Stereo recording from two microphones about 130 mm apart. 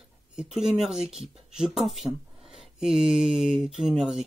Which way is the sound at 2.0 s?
Centre (ahead or behind).